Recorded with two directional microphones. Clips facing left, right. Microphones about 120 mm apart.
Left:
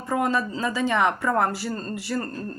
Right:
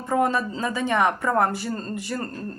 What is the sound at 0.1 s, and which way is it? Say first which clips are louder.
Speech: right 2 dB; 25° right (ahead or behind).